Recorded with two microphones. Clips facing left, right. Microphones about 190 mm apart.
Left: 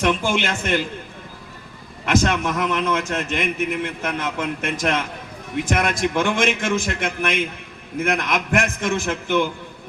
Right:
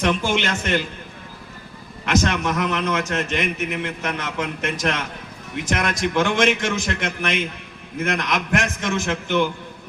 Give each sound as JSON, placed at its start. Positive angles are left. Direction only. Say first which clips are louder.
{"t": 0.0, "sound": "a man's voice", "louder": "left 1 dB", "side_deg": 50}
{"t": 2.0, "sound": "a man's voice", "louder": "left 1 dB", "side_deg": 50}